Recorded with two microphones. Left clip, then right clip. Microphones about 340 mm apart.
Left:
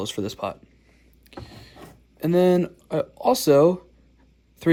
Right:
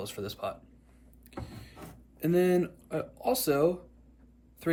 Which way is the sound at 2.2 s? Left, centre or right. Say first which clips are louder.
Left 7 dB; centre.